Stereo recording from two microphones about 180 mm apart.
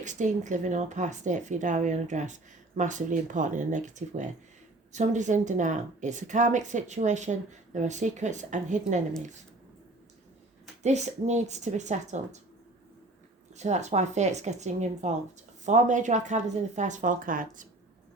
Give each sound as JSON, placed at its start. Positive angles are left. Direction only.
{"t": 0.0, "sound": "a woman's voice", "side_deg": -45}
{"t": 10.8, "sound": "a woman's voice", "side_deg": -40}
{"t": 13.6, "sound": "a woman's voice", "side_deg": -40}